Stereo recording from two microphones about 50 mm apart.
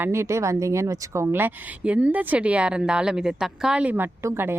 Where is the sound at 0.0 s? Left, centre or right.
Right.